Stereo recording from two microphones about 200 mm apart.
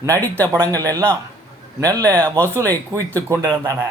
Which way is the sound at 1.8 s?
15° right (ahead or behind).